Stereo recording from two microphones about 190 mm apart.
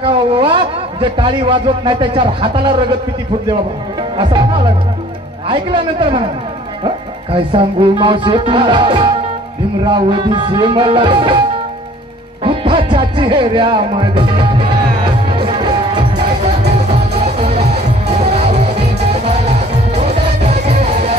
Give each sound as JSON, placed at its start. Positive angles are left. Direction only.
{"t": 0.0, "sound": "a sound", "side_deg": -25}
{"t": 1.1, "sound": "speech", "side_deg": -25}
{"t": 4.2, "sound": "speech", "side_deg": -25}
{"t": 7.3, "sound": "speech", "side_deg": -25}
{"t": 12.4, "sound": "music", "side_deg": -25}
{"t": 17.1, "sound": "music", "side_deg": -35}